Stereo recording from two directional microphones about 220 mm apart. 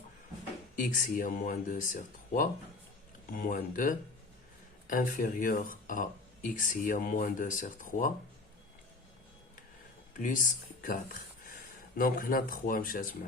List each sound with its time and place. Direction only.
0.8 s speech: 40° left (ahead or behind)
10.2 s speech: 35° left (ahead or behind)